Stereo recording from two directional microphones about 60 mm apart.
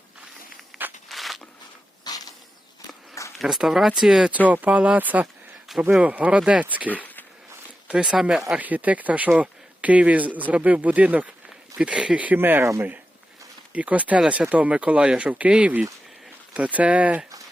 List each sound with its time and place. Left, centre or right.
1.0 s zipper: centre
2.0 s a sound: left
3.3 s speech: centre
4.4 s speech: right
6.8 s a sound: left
7.9 s speech: centre
8.5 s speech: right
12.4 s speech: right
13.7 s speech: right